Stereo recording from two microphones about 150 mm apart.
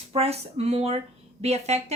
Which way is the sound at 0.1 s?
45° right (ahead or behind).